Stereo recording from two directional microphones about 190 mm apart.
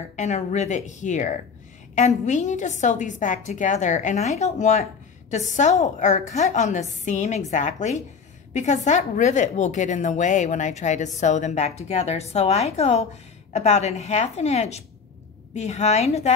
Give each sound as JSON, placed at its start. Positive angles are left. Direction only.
{"t": 0.1, "sound": "a woman's voice", "side_deg": 40}